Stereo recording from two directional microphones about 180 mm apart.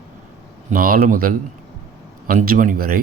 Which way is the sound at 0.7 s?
55° right (ahead or behind).